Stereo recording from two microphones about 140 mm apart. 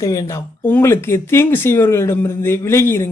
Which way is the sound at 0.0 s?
20° left (ahead or behind).